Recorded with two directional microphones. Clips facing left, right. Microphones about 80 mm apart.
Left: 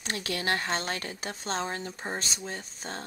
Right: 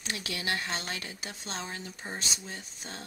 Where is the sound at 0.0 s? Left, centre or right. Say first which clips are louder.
Left 4 dB; left.